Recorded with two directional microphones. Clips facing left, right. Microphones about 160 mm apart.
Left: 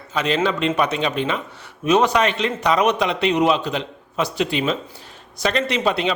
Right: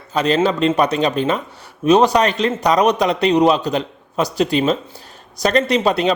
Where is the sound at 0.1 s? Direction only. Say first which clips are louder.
Right 4 dB; 40° right (ahead or behind).